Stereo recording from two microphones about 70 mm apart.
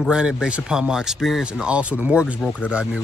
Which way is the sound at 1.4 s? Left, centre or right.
Centre.